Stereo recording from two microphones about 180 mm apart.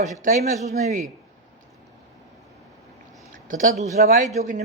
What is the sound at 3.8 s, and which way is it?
Speech, 45° right (ahead or behind).